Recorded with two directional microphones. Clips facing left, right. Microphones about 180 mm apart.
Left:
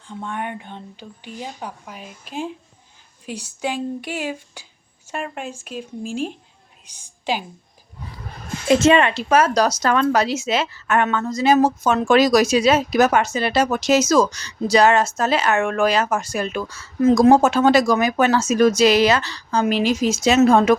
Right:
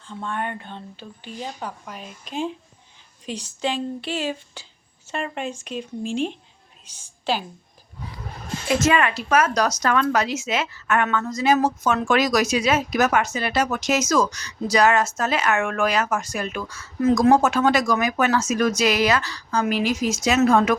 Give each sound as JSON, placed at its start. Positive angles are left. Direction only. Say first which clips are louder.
{"t": 0.1, "sound": "a woman's voice", "louder": "even", "side_deg": 15}
{"t": 8.6, "sound": "speech", "louder": "left 5 dB", "side_deg": 25}